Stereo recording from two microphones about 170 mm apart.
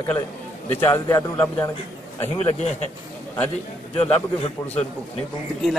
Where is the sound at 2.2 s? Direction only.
35° left (ahead or behind).